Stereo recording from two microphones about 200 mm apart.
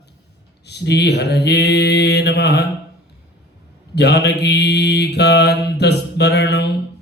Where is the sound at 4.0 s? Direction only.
55° left (ahead or behind).